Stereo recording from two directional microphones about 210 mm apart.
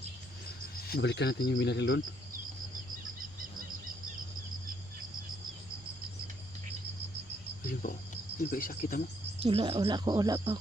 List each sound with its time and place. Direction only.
0.9 s speech: 50° left (ahead or behind)
7.7 s speech: 40° left (ahead or behind)
9.4 s speech: 25° right (ahead or behind)